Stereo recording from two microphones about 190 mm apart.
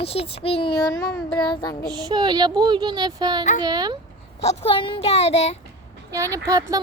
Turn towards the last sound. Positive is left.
turn(degrees=-20)  # may be behind; listen again after turning